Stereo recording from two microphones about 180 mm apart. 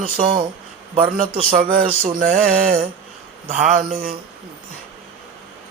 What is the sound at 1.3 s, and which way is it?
Mantra, 30° right (ahead or behind).